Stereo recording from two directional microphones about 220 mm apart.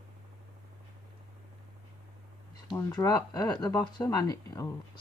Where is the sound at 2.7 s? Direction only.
20° left (ahead or behind).